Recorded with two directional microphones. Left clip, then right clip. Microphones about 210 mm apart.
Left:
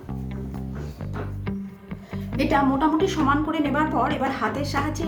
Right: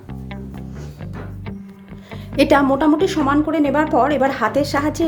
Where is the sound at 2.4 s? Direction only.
55° right (ahead or behind).